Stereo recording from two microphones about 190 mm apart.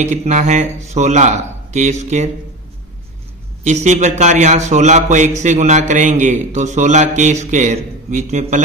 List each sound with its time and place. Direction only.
0.0 s a man's voice: 35° right (ahead or behind)
3.6 s a man's voice: 35° right (ahead or behind)